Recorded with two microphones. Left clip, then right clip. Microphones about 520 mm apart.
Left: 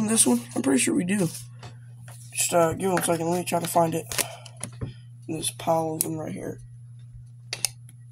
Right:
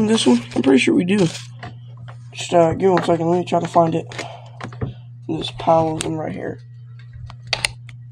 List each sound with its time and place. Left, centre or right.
0.0 s speech: left
2.6 s speech: left